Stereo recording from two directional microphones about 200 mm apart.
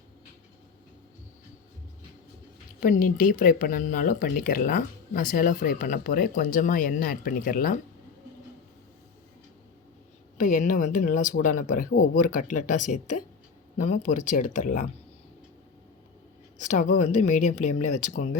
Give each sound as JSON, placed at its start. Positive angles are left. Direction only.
{"t": 2.8, "sound": "speech", "side_deg": 45}
{"t": 10.3, "sound": "speech", "side_deg": 40}
{"t": 16.6, "sound": "speech", "side_deg": 35}